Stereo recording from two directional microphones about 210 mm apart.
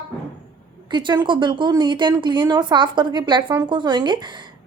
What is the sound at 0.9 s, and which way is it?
A woman's voice, 20° right (ahead or behind).